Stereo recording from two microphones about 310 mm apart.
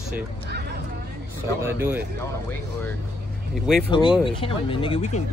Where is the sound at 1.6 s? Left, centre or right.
Centre.